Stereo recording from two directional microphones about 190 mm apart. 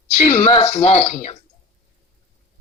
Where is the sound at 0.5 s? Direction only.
30° left (ahead or behind).